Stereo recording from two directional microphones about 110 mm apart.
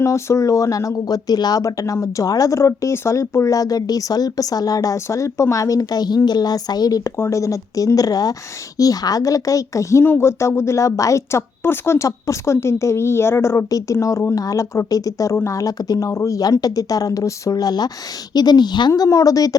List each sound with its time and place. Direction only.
0.0 s speech: 25° left (ahead or behind)